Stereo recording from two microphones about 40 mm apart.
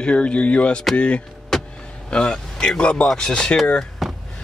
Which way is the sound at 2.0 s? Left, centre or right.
Left.